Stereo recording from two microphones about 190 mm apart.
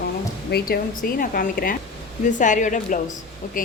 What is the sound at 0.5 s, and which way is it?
A woman's voice, 55° left (ahead or behind).